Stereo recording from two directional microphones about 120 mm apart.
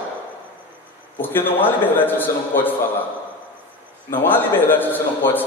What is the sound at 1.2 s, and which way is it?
A man's voice, 15° left (ahead or behind).